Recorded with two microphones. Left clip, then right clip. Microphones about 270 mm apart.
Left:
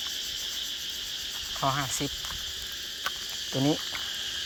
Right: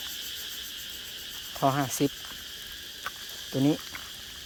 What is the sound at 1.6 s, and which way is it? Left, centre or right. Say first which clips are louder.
Cricket: right 3 dB; right.